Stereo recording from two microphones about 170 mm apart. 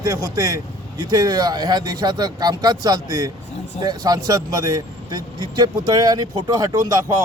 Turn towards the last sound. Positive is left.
turn(degrees=-20)  # may be behind; listen again after turning